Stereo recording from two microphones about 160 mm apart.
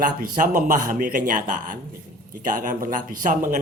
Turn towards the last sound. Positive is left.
turn(degrees=-55)  # may be behind; listen again after turning